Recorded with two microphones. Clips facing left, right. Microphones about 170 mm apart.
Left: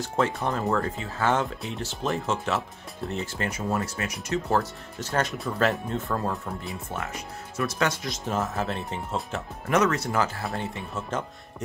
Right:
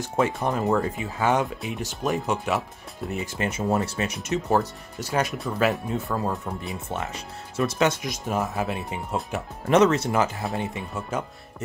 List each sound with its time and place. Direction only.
0.0 s speech: 15° right (ahead or behind)
3.4 s speech: 25° right (ahead or behind); by 6.4 s 5° right (ahead or behind)
6.9 s speech: 25° right (ahead or behind)
9.7 s speech: 25° right (ahead or behind)